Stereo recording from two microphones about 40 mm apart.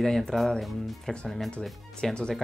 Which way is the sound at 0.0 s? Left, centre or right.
Centre.